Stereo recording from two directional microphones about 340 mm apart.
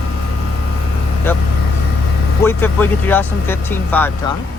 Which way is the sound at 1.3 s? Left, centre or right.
Centre.